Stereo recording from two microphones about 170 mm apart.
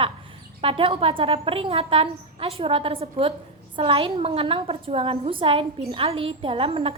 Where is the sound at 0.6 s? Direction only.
30° right (ahead or behind).